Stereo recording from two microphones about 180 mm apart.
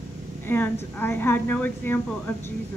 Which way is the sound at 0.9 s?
10° left (ahead or behind).